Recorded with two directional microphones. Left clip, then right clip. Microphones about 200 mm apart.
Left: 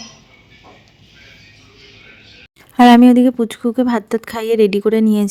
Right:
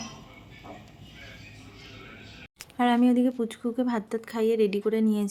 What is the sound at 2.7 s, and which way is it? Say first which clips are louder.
A woman's voice: left 15 dB; 50° left (ahead or behind).